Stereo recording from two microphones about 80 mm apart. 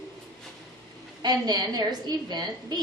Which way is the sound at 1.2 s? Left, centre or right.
Right.